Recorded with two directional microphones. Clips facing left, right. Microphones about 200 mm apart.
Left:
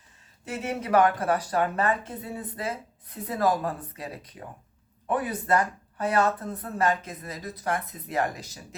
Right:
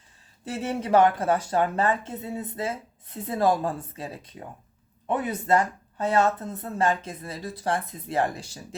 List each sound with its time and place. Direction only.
0.4 s speech: 30° right (ahead or behind)